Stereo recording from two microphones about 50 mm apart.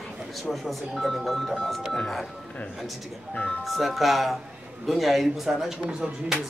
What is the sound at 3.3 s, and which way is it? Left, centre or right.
Speech, left.